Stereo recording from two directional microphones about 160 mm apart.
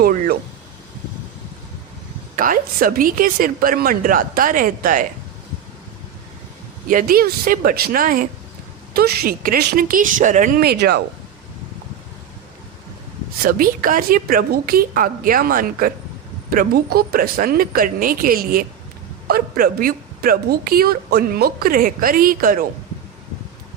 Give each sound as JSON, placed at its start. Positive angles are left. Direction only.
{"t": 0.0, "sound": "a sound", "side_deg": -70}
{"t": 2.3, "sound": "a woman's voice", "side_deg": -60}
{"t": 6.8, "sound": "a woman's voice", "side_deg": -65}
{"t": 8.9, "sound": "a woman's voice", "side_deg": -70}
{"t": 13.4, "sound": "a woman's voice", "side_deg": -65}